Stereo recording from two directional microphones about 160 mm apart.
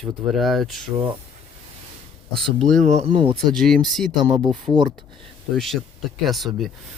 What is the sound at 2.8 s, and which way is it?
Speech, 45° right (ahead or behind).